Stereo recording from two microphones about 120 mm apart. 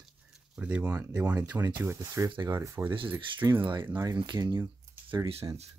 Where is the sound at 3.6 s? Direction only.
40° right (ahead or behind).